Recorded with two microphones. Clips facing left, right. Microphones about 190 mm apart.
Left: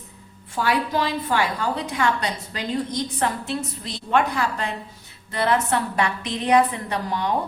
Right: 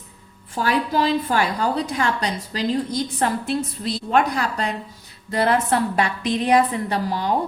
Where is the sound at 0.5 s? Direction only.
35° right (ahead or behind).